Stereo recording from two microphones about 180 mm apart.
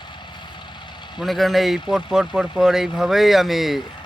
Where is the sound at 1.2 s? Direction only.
Centre (ahead or behind).